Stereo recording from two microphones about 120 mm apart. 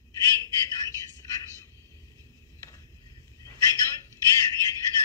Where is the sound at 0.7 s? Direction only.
25° left (ahead or behind).